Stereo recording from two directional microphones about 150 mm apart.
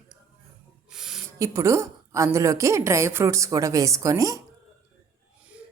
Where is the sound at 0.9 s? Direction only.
5° right (ahead or behind).